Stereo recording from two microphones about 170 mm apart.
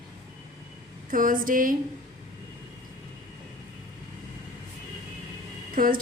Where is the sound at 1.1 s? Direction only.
55° right (ahead or behind).